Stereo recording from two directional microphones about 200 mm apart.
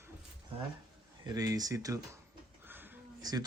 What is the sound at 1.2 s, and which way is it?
Speech, 20° right (ahead or behind).